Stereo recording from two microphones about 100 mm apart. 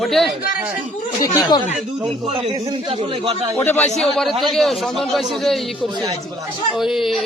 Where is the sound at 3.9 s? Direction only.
5° left (ahead or behind).